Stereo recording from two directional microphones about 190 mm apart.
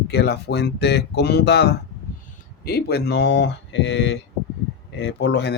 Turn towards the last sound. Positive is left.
turn(degrees=65)  # may be behind; listen again after turning